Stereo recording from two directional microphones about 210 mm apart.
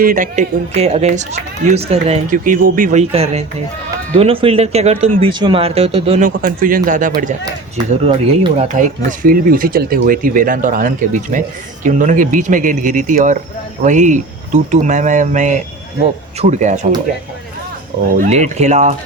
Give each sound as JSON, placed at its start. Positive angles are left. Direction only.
{"t": 0.0, "sound": "speech", "side_deg": -40}
{"t": 8.0, "sound": "speech", "side_deg": -25}
{"t": 18.1, "sound": "speech", "side_deg": -35}